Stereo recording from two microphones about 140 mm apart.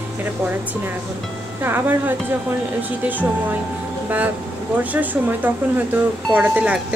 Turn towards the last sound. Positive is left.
turn(degrees=-10)  # may be behind; listen again after turning